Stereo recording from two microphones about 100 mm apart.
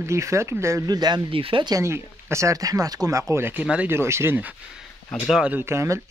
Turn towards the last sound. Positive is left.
turn(degrees=-30)  # may be behind; listen again after turning